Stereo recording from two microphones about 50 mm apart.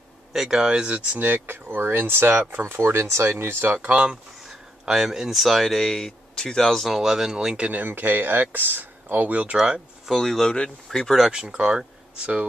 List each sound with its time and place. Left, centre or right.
0.3 s speech: centre
1.2 s speech: right
2.8 s speech: right
3.6 s speech: right
4.5 s speech: centre
7.0 s speech: centre
7.7 s speech: right
10.0 s speech: centre
11.1 s speech: centre